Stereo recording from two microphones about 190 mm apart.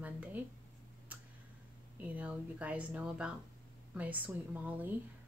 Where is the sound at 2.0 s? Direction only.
5° right (ahead or behind).